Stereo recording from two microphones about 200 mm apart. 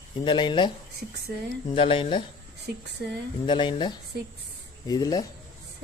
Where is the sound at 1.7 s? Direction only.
25° left (ahead or behind).